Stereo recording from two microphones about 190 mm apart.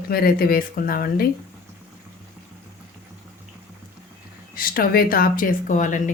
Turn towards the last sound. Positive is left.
turn(degrees=40)  # may be behind; listen again after turning